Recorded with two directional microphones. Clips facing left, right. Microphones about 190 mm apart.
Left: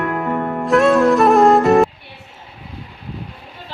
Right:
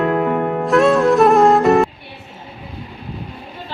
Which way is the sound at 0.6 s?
Centre (ahead or behind).